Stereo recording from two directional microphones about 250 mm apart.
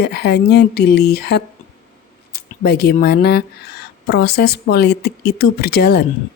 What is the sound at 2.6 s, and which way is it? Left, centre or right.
Speech, left.